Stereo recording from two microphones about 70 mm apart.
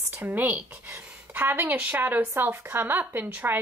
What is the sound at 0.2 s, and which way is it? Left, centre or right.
Speech, right.